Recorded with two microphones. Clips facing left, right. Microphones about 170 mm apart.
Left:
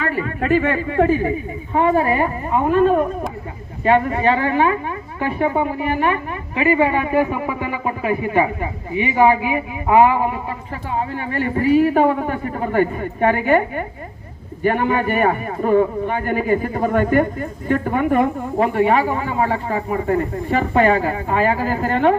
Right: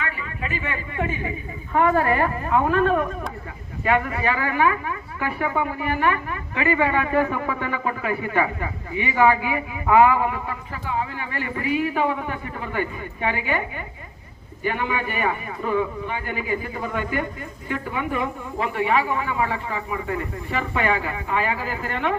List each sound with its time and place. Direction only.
0.0 s a man's voice: 45° left (ahead or behind)
1.7 s a man's voice: 20° left (ahead or behind)
10.8 s a man's voice: 40° left (ahead or behind)